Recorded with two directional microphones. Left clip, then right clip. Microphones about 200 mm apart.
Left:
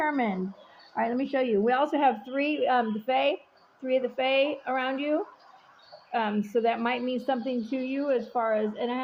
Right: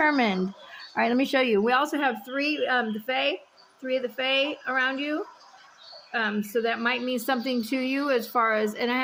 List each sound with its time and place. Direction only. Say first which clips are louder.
0.0 s speech: right 5 dB; 30° right (ahead or behind)
1.6 s speech: even; 10° right (ahead or behind)
7.3 s speech: right 3 dB; 30° right (ahead or behind)